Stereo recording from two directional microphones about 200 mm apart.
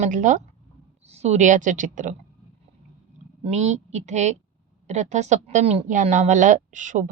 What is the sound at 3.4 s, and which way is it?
Speech, 35° right (ahead or behind).